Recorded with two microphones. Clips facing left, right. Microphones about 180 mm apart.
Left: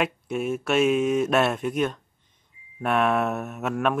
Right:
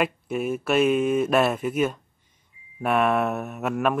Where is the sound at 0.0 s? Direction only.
Centre (ahead or behind).